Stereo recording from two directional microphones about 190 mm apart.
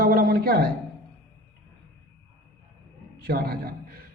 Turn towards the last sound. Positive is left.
turn(degrees=-50)  # may be behind; listen again after turning